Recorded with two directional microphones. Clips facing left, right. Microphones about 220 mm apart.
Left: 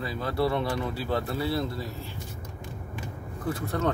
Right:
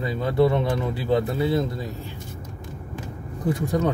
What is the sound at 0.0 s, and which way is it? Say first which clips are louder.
Speech: right 7 dB; 20° right (ahead or behind).